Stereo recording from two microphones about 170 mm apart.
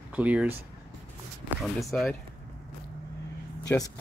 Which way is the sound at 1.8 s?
5° left (ahead or behind).